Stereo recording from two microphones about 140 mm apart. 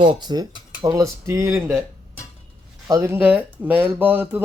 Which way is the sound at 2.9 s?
20° right (ahead or behind).